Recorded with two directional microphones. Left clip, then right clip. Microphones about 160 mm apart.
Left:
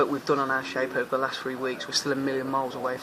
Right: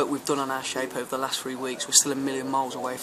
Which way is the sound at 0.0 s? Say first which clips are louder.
Left 2 dB; 25° right (ahead or behind).